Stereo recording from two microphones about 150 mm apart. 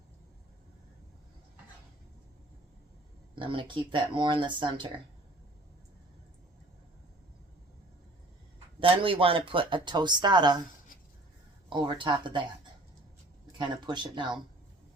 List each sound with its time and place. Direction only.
3.3 s speech: 35° right (ahead or behind)
8.8 s speech: 35° right (ahead or behind)
11.7 s speech: 35° right (ahead or behind)
13.6 s speech: 30° right (ahead or behind)